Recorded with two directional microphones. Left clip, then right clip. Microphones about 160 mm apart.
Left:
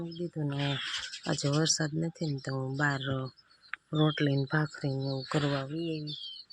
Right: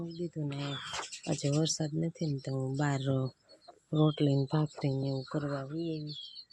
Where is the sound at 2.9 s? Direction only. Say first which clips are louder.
Even; 40° right (ahead or behind).